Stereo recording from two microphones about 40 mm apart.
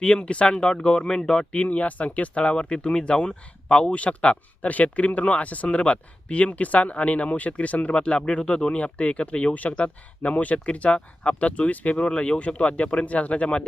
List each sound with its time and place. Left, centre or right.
0.0 s speech: left
1.0 s speech: centre
1.5 s speech: left
3.9 s speech: left
7.9 s speech: left